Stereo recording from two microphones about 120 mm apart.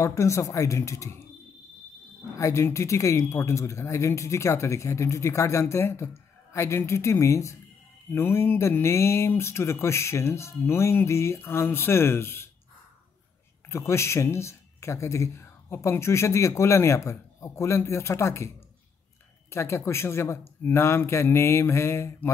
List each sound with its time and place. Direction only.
0.0 s speech: 25° left (ahead or behind)
2.3 s speech: 25° left (ahead or behind)
13.7 s speech: 20° left (ahead or behind)
19.5 s speech: 20° left (ahead or behind)